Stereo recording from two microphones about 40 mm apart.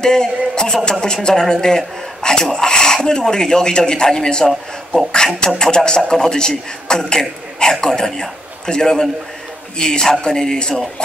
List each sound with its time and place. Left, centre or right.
0.0 s a man's voice: centre